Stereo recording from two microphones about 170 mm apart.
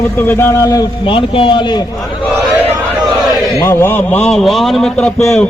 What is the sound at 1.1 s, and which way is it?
Speech, 30° left (ahead or behind).